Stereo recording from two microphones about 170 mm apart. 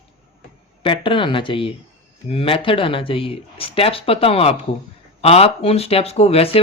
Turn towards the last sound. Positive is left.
turn(degrees=35)  # may be behind; listen again after turning